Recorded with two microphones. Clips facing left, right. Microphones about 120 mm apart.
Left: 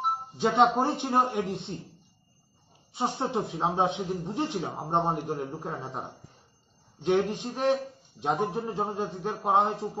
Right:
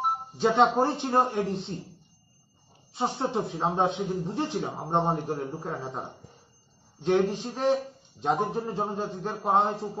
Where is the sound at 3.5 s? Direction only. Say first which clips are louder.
Right 1 dB; 5° left (ahead or behind).